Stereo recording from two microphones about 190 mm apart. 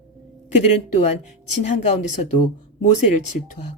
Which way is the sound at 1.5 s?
35° left (ahead or behind).